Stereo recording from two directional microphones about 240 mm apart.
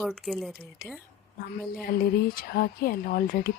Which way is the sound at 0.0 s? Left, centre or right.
Centre.